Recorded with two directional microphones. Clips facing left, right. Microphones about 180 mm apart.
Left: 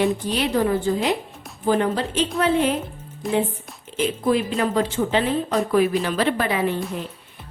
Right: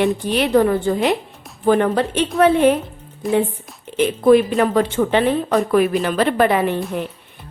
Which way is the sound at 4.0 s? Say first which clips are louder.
Right 8 dB; 60° right (ahead or behind).